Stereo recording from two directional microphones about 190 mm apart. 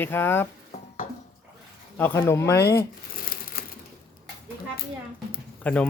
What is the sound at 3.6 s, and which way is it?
Typewriter, 50° left (ahead or behind).